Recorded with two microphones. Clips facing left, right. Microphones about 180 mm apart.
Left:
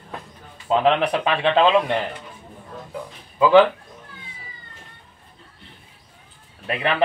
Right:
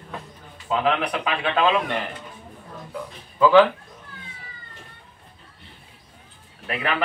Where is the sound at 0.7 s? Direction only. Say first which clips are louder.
Left 4 dB; 30° left (ahead or behind).